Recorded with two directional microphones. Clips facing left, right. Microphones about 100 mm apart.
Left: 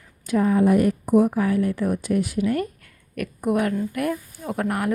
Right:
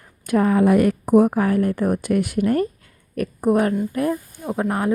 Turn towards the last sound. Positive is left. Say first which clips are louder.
# right 3 dB
turn(degrees=-25)  # may be behind; listen again after turning